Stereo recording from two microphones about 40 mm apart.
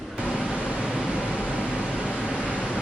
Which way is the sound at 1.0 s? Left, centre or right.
Right.